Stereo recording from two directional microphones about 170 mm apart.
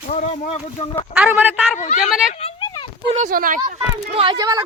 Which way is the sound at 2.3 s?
30° left (ahead or behind).